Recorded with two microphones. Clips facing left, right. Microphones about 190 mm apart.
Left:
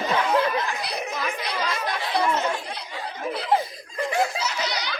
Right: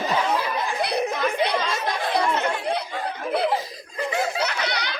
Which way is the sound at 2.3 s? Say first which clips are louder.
Right 3 dB; 60° right (ahead or behind).